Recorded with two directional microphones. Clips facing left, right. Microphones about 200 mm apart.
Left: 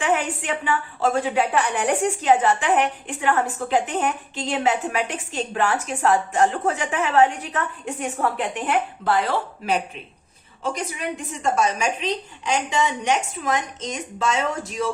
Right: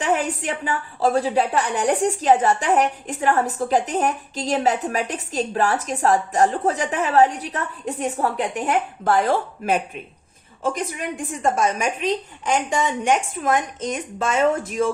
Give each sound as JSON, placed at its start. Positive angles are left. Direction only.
{"t": 0.0, "sound": "a woman's voice", "side_deg": -40}